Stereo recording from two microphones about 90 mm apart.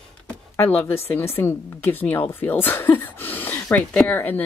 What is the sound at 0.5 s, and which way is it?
Speech, 30° left (ahead or behind).